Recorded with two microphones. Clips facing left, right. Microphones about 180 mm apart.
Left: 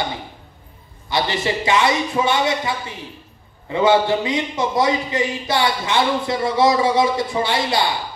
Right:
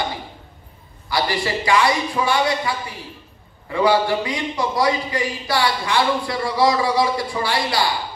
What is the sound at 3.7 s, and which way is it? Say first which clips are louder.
A man's voice: left 2 dB; 20° left (ahead or behind).